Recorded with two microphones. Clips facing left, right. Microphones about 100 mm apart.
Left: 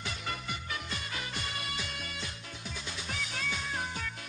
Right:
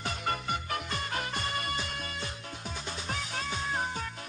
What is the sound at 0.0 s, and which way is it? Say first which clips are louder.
Music: right 5 dB; 50° right (ahead or behind).